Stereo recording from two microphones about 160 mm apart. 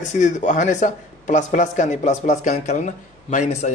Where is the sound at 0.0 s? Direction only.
50° left (ahead or behind).